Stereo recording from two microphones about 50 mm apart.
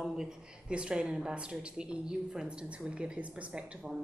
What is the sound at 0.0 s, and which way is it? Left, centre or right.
A woman's voice, centre.